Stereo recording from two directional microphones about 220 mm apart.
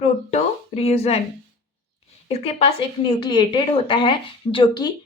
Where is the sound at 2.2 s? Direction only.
25° left (ahead or behind).